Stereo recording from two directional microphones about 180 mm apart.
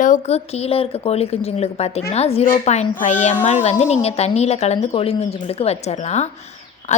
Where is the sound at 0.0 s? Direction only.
40° left (ahead or behind).